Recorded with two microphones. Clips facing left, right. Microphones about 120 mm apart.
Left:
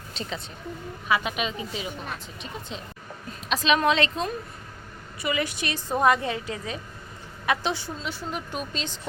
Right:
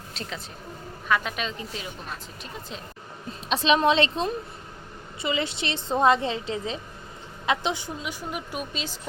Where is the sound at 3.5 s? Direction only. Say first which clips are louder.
Right 1 dB; 30° right (ahead or behind).